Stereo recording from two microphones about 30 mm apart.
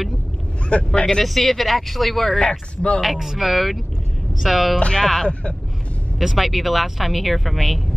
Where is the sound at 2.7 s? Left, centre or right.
Left.